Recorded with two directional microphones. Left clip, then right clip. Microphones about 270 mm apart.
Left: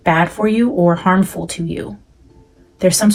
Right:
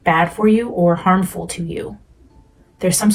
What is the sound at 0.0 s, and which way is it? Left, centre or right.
Speech, left.